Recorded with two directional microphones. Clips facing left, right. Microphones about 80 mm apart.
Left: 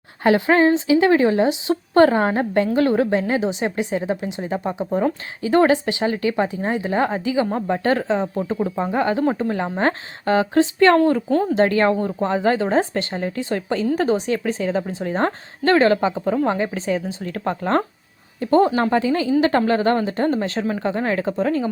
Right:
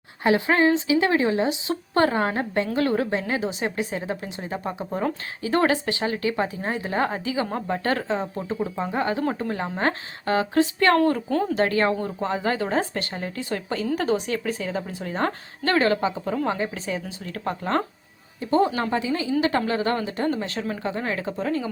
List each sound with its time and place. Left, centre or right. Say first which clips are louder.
0.3 s a woman's voice: left 4 dB; left; by 4.9 s centre
5.4 s a woman's voice: left 6 dB; left
11.3 s speech: left 5 dB; centre
11.5 s a woman's voice: left 5 dB; left
18.3 s a woman's voice: left 5 dB; left